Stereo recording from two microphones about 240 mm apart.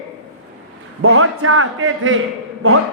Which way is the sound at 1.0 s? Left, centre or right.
Right.